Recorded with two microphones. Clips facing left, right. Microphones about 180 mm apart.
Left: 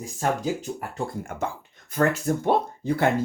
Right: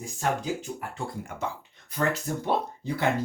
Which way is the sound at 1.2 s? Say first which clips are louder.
Left 3 dB; 50° left (ahead or behind).